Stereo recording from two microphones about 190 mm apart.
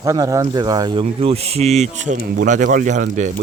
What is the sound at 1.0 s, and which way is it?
Speech, 30° right (ahead or behind).